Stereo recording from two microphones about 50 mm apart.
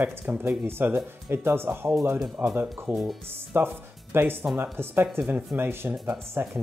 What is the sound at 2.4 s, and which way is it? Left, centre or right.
Speech, right.